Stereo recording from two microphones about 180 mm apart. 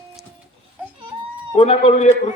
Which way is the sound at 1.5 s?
35° left (ahead or behind).